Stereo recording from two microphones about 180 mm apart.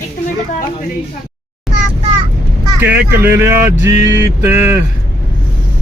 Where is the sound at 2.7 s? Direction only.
10° right (ahead or behind).